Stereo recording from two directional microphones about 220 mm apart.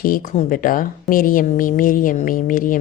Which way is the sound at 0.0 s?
40° left (ahead or behind).